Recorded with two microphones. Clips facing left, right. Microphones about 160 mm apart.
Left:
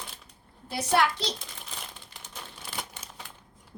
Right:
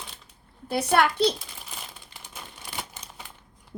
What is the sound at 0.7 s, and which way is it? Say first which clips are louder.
Speech: right 3 dB; 60° right (ahead or behind).